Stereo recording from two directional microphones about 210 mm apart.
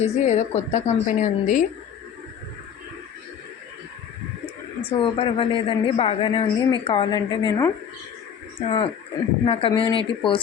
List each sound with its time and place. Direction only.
0.0 s a woman's voice: 30° left (ahead or behind)
4.9 s speech: 25° left (ahead or behind)